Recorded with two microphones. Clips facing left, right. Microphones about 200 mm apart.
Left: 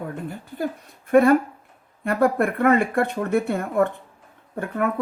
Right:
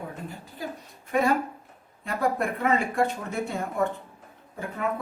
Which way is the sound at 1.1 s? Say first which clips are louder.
Left 9 dB; 55° left (ahead or behind).